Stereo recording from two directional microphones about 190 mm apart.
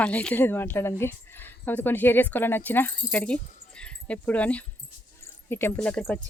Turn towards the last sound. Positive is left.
turn(degrees=5)  # may be behind; listen again after turning